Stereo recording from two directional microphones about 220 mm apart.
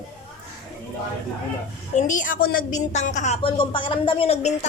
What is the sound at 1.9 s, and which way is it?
A woman's voice, 35° left (ahead or behind).